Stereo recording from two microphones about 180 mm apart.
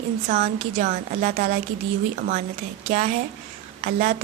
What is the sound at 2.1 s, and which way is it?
Speech, 55° right (ahead or behind).